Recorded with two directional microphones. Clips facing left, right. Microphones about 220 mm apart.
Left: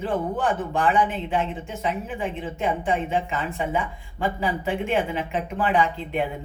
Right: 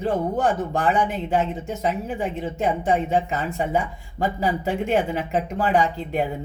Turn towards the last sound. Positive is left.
turn(degrees=-40)  # may be behind; listen again after turning